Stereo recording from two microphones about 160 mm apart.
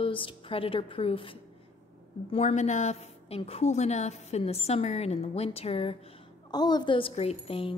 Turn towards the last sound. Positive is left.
turn(degrees=35)  # may be behind; listen again after turning